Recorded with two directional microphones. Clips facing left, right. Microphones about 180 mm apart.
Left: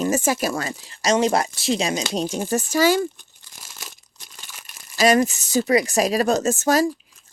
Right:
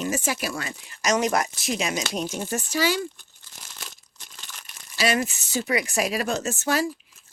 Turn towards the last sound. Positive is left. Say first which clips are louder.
# left 6 dB
turn(degrees=40)  # may be behind; listen again after turning